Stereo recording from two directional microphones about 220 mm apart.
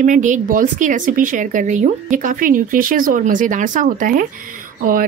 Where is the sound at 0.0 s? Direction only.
35° right (ahead or behind).